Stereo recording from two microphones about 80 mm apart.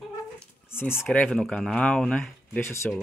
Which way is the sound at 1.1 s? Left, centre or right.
Centre.